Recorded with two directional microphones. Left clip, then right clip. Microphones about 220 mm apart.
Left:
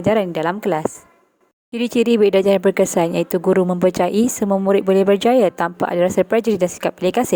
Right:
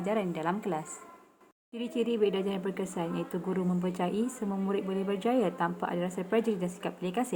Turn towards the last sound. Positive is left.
turn(degrees=45)  # may be behind; listen again after turning